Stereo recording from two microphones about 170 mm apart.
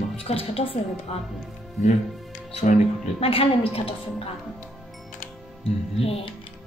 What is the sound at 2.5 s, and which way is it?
A woman's voice, 40° left (ahead or behind).